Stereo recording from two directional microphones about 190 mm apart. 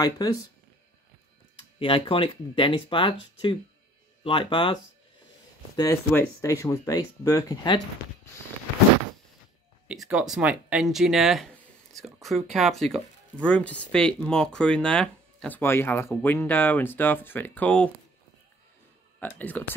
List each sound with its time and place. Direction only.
0.0 s speech: 20° left (ahead or behind)
1.8 s speech: 25° left (ahead or behind)
5.8 s speech: 15° left (ahead or behind)
9.8 s speech: 5° right (ahead or behind)
19.1 s speech: 10° left (ahead or behind)